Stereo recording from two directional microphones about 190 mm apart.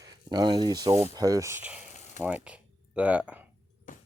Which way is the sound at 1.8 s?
40° left (ahead or behind).